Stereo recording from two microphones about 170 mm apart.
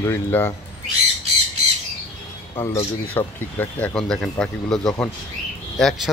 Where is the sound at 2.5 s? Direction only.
15° left (ahead or behind).